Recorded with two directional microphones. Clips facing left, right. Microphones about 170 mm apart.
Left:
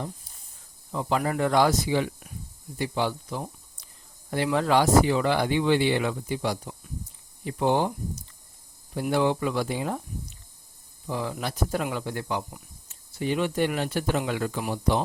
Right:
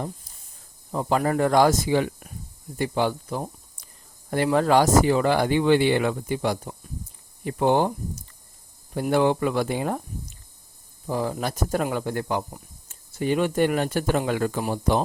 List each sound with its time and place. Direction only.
0.9 s speech: 40° right (ahead or behind)
3.8 s a sound: 50° right (ahead or behind)
4.5 s speech: 45° right (ahead or behind)